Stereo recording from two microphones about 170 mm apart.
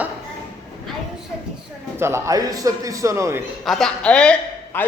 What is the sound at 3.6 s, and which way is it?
A man's voice, 5° left (ahead or behind).